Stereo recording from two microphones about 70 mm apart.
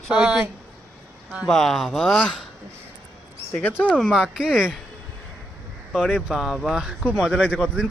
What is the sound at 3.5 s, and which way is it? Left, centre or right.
Speech, left.